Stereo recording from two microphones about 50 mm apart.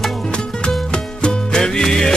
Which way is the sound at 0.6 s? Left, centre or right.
Centre.